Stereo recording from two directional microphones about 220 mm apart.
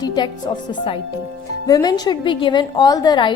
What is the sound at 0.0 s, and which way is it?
A woman's voice, 20° left (ahead or behind).